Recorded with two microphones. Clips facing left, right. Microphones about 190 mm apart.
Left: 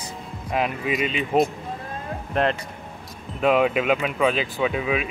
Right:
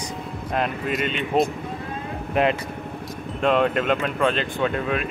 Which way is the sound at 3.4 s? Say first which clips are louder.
Left 1 dB; 5° left (ahead or behind).